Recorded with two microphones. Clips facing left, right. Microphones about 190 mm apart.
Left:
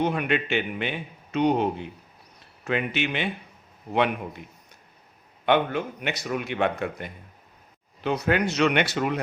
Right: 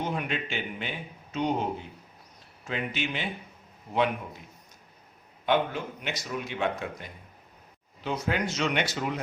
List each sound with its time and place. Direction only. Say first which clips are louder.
0.0 s a man's voice: left 7 dB; 65° left (ahead or behind)
5.5 s a man's voice: left 4 dB; 65° left (ahead or behind)